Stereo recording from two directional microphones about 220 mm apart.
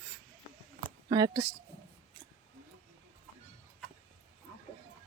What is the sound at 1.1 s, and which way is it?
Speech, 15° right (ahead or behind).